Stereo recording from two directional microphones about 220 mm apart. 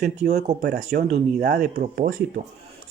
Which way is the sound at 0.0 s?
45° right (ahead or behind).